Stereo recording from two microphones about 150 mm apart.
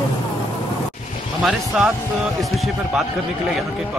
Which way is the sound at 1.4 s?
5° right (ahead or behind).